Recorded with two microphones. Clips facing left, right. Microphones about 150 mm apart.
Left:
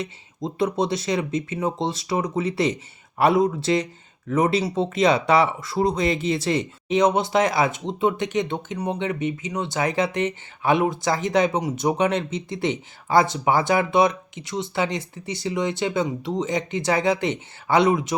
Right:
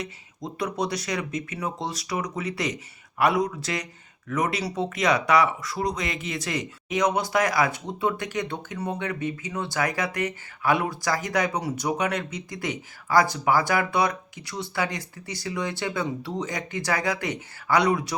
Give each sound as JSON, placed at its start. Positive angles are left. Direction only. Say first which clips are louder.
{"t": 0.0, "sound": "speech", "louder": "left 5 dB", "side_deg": 25}